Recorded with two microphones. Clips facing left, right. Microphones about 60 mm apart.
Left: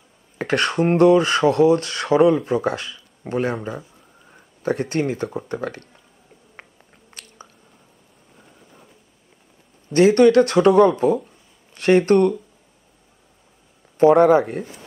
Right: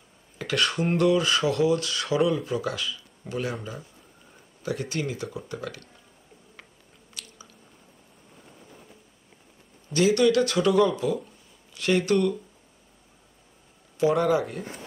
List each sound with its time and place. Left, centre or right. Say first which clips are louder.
0.4 s speech: left 6 dB; left
3.5 s speech: left 7 dB; left
4.6 s speech: left 8 dB; left
7.1 s chewing: left 2 dB; left
9.9 s speech: left 8 dB; left
13.9 s speech: left 9 dB; left